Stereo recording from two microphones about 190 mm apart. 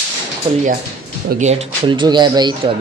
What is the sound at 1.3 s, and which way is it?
Speech, 40° right (ahead or behind).